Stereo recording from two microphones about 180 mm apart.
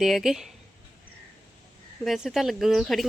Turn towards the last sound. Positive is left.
turn(degrees=0)  # may be behind; listen again after turning